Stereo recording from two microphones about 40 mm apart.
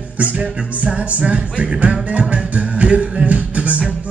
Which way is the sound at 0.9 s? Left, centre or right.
Right.